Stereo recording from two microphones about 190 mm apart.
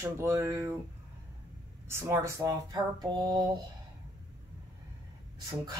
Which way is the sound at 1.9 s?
15° right (ahead or behind).